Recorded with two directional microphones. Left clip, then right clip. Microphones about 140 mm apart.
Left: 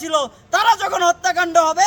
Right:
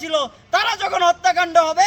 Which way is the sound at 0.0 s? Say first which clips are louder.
Left 1 dB; 35° left (ahead or behind).